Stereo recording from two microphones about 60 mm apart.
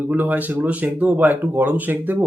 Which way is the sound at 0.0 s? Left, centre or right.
Right.